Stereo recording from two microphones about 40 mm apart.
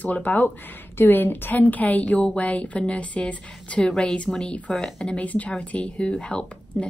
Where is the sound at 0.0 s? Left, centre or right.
Left.